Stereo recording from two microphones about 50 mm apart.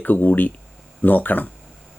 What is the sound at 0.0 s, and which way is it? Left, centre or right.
Speech, left.